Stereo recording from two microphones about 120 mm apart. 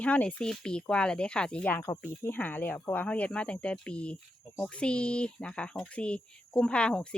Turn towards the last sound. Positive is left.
turn(degrees=10)  # may be behind; listen again after turning